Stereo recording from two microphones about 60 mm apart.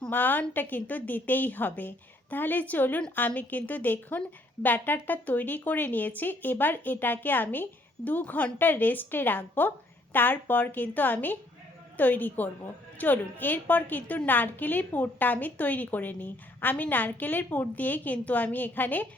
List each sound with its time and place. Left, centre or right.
0.1 s a woman's voice: left